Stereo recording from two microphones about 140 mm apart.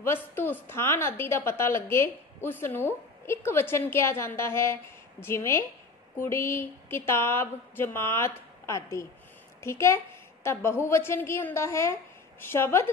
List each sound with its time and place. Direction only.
0.0 s a woman's voice: 15° left (ahead or behind)